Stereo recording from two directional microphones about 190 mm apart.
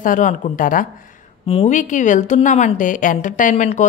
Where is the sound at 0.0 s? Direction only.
40° left (ahead or behind).